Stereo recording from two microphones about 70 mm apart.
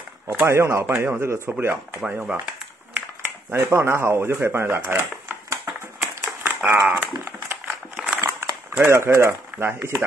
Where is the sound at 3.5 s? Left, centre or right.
Right.